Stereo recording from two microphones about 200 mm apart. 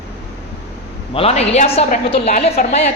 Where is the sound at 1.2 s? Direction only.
30° left (ahead or behind).